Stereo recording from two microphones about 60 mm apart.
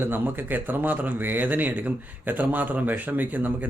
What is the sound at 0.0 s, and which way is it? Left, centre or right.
A man's voice, right.